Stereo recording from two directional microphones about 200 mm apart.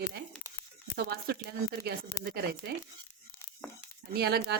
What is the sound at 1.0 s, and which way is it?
Speech, 55° right (ahead or behind).